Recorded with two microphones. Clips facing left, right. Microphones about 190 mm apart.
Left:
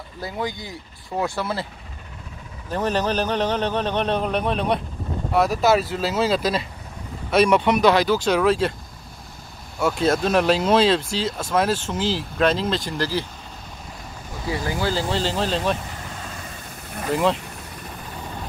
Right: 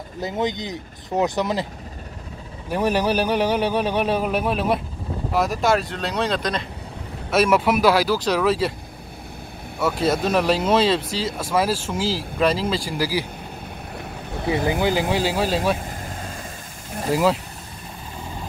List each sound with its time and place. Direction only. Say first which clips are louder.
0.2 s speech: right 4 dB; 20° right (ahead or behind)
2.7 s a man's voice: right 2 dB; 10° right (ahead or behind)
9.8 s speech: left 1 dB; 5° right (ahead or behind)
13.9 s boat: right 6 dB; 60° right (ahead or behind)
14.7 s a man's voice: right 1 dB; 20° right (ahead or behind)
17.1 s speech: right 1 dB; 5° right (ahead or behind)